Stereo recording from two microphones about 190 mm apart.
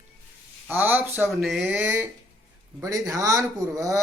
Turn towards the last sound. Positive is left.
turn(degrees=-15)  # may be behind; listen again after turning